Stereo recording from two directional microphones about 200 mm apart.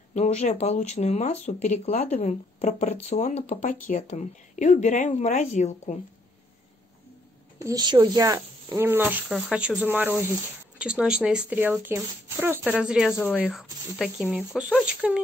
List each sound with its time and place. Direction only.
0.1 s speech: 35° left (ahead or behind)
7.6 s speech: 20° right (ahead or behind); by 13.1 s 5° right (ahead or behind)
13.1 s speech: 10° left (ahead or behind)
13.6 s speech: centre (ahead or behind)